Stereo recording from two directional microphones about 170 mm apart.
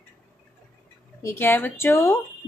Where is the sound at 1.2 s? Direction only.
10° left (ahead or behind).